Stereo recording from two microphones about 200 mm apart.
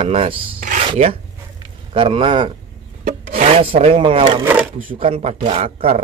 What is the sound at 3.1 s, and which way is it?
Wood, 30° right (ahead or behind).